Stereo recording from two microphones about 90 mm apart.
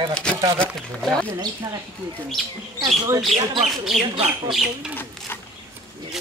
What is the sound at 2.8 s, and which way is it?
Speech, 45° right (ahead or behind).